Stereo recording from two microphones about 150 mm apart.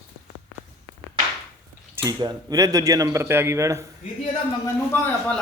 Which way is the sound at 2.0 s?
25° right (ahead or behind).